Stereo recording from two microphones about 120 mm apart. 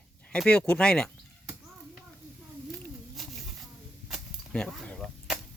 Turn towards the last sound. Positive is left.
turn(degrees=10)  # may be behind; listen again after turning